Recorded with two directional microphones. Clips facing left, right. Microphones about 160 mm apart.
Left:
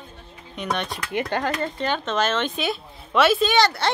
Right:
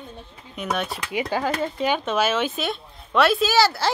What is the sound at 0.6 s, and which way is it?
Speech, 5° right (ahead or behind).